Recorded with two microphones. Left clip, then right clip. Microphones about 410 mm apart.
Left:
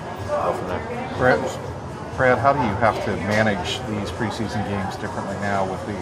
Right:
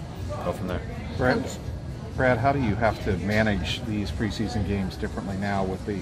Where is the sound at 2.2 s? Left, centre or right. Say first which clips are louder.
Left 5 dB; centre.